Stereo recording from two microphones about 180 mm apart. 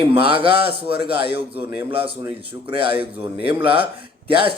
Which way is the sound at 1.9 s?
30° right (ahead or behind).